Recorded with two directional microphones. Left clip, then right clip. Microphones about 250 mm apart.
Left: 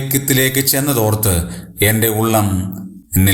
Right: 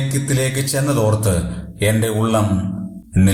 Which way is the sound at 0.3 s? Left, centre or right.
Left.